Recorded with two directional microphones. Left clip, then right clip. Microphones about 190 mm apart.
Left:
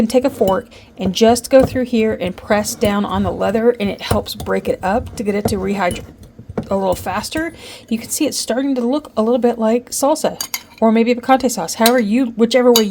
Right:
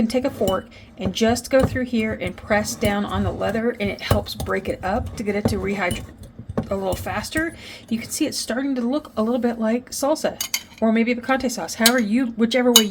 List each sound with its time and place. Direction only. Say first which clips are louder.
0.0 s speech: left 7 dB; 40° left (ahead or behind)